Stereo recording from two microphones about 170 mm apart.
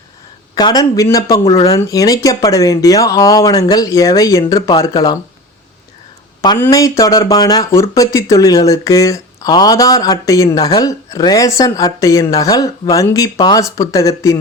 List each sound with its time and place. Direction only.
0.5 s speech: 20° left (ahead or behind)
6.6 s speech: 20° left (ahead or behind)